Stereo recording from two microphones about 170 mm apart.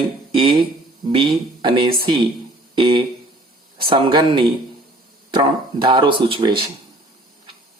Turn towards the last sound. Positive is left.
turn(degrees=-30)  # may be behind; listen again after turning